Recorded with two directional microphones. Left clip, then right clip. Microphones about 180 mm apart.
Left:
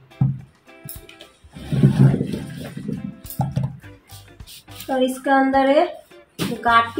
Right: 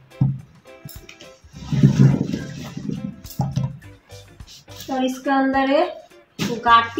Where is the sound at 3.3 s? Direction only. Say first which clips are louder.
Left 2 dB; centre (ahead or behind).